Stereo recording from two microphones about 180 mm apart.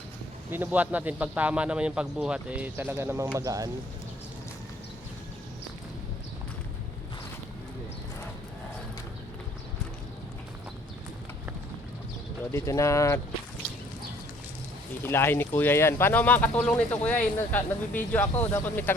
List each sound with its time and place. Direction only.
0.5 s speech: 10° right (ahead or behind)
12.5 s speech: 15° left (ahead or behind)
15.0 s speech: 10° left (ahead or behind)